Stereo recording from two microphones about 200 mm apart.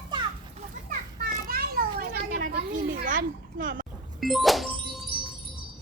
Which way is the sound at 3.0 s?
40° right (ahead or behind).